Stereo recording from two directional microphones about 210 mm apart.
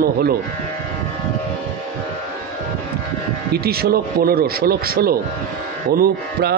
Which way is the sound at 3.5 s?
45° right (ahead or behind).